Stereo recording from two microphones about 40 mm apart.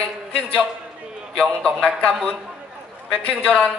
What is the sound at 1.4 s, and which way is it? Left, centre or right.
A man's voice, left.